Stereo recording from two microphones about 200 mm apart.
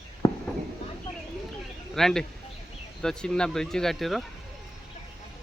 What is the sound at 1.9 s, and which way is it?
Speech, centre (ahead or behind).